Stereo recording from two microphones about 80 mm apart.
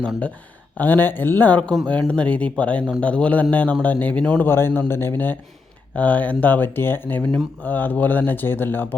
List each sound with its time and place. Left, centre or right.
0.8 s speech: left
4.4 s speech: left